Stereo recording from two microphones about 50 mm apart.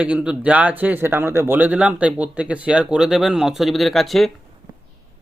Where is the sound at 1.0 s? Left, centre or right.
Right.